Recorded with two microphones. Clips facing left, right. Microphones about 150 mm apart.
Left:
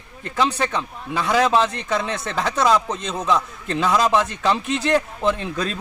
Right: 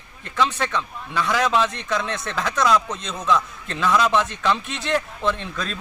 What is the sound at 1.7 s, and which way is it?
Speech, 5° left (ahead or behind).